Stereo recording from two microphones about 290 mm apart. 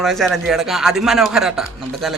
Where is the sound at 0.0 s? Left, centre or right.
Centre.